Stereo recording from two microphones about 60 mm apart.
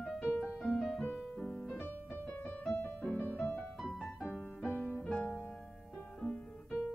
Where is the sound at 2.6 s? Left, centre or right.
Left.